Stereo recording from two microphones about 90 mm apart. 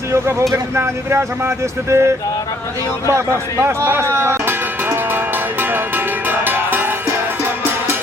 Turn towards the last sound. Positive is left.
turn(degrees=-25)  # may be behind; listen again after turning